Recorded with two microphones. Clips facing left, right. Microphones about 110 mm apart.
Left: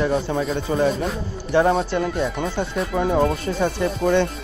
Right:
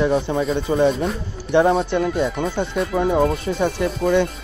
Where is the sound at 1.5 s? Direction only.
20° right (ahead or behind).